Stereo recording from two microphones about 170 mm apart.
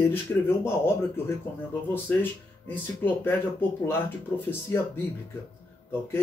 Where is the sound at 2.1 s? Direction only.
10° left (ahead or behind).